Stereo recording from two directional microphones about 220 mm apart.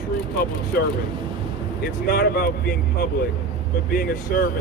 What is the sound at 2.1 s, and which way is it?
Speech, 45° left (ahead or behind).